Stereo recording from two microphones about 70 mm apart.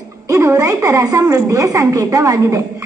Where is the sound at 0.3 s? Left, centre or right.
Right.